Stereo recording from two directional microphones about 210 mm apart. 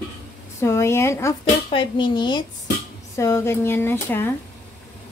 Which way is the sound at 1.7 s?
25° left (ahead or behind).